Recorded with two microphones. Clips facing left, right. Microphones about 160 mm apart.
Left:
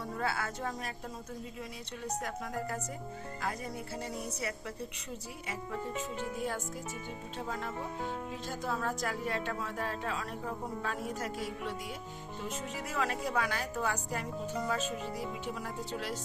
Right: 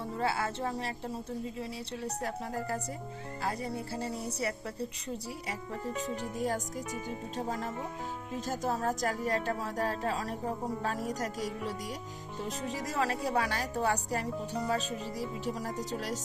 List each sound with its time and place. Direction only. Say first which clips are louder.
0.2 s a woman's voice: right 4 dB; 25° right (ahead or behind)